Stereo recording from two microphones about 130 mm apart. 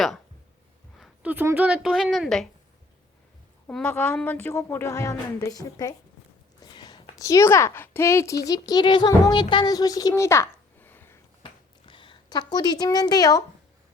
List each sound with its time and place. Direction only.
1.2 s a woman's voice: 15° right (ahead or behind)
3.7 s a woman's voice: 10° left (ahead or behind)
11.4 s a sound: 40° left (ahead or behind)